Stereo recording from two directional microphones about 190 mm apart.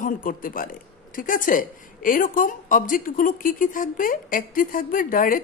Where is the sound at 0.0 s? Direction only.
45° left (ahead or behind).